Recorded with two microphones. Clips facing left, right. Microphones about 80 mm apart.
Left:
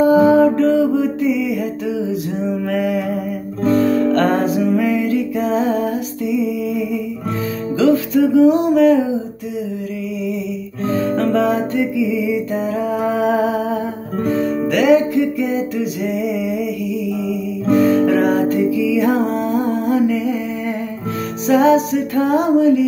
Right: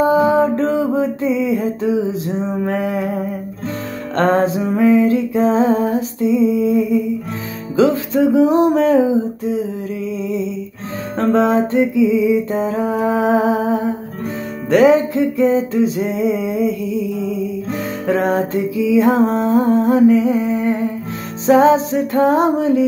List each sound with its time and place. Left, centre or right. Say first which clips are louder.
0.0 s music: left 2 dB; right
2.7 s mantra: left 3 dB; right
3.6 s guitar: left 13 dB; left
4.1 s music: even; right
11.1 s music: right 5 dB; right
18.0 s music: left 2 dB; right